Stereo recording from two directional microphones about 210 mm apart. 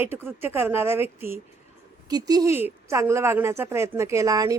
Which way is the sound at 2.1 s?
20° right (ahead or behind).